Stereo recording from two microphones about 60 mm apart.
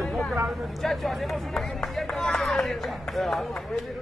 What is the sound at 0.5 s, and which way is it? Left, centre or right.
Speech, centre.